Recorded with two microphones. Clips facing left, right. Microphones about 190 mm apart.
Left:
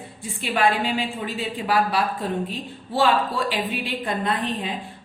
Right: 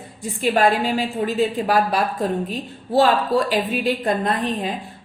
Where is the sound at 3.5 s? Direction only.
40° right (ahead or behind).